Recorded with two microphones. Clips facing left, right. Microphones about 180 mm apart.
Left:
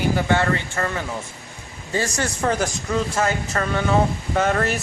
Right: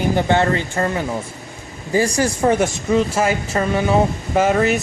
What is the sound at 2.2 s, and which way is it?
Speech, 30° right (ahead or behind).